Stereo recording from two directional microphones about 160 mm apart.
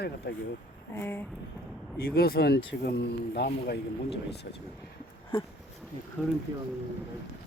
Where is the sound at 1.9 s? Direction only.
70° left (ahead or behind).